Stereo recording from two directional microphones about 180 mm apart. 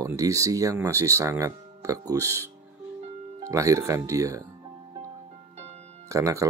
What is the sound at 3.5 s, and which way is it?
Speech, 15° right (ahead or behind).